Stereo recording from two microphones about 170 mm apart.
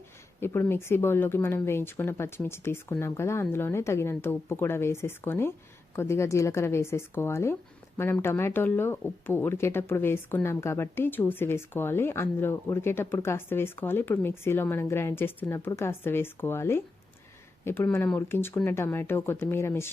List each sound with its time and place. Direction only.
0.3 s speech: 15° left (ahead or behind)